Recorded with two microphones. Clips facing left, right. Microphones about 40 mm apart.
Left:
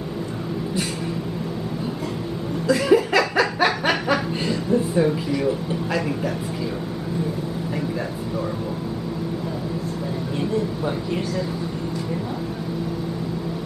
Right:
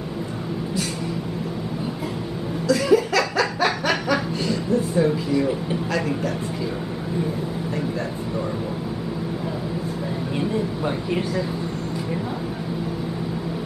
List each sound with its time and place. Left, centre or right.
2.7 s snicker: centre
5.9 s speech: centre
11.1 s speech: centre